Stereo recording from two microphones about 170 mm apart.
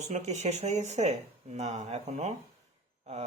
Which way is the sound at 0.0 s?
40° right (ahead or behind).